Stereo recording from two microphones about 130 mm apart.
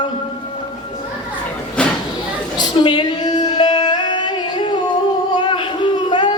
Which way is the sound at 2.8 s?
35° left (ahead or behind).